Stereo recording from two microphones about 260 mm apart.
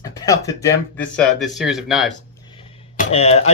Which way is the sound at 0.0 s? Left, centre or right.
Centre.